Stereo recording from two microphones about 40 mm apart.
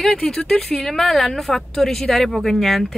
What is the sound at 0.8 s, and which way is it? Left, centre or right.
Speech, centre.